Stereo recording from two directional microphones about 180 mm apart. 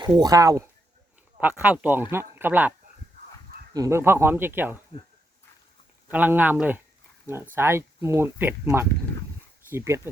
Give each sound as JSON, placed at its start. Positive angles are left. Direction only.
{"t": 0.2, "sound": "speech", "side_deg": -20}
{"t": 1.4, "sound": "speech", "side_deg": -10}
{"t": 3.8, "sound": "speech", "side_deg": -15}
{"t": 6.1, "sound": "speech", "side_deg": -10}
{"t": 9.6, "sound": "speech", "side_deg": -15}